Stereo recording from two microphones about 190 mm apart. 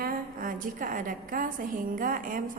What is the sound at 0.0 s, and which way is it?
A woman's voice, 50° right (ahead or behind).